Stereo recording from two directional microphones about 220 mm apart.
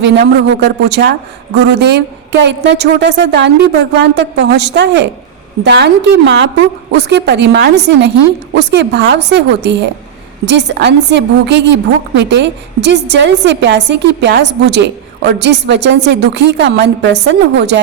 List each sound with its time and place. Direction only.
0.0 s a woman's voice: 50° right (ahead or behind)